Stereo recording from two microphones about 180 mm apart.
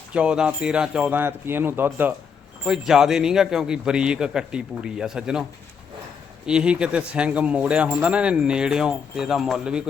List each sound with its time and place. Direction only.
0.1 s speech: 5° right (ahead or behind)